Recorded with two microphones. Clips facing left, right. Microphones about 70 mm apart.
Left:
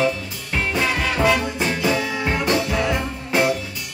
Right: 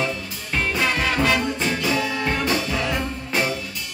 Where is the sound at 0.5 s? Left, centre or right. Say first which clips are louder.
Left 1 dB; centre.